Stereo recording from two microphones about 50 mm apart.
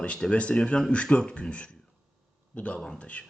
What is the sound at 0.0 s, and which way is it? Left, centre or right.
Speech, left.